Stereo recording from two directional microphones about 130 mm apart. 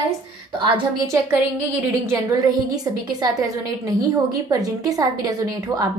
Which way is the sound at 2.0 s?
30° right (ahead or behind).